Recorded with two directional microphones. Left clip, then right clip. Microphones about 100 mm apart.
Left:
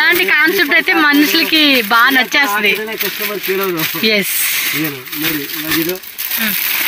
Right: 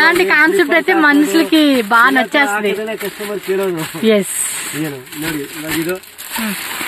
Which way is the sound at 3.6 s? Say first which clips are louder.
Left 2 dB; 20° right (ahead or behind).